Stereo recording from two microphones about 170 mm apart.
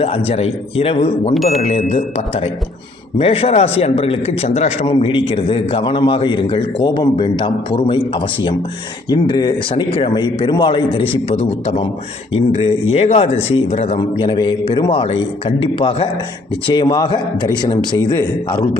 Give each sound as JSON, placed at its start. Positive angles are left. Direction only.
{"t": 0.3, "sound": "a man's voice", "side_deg": 35}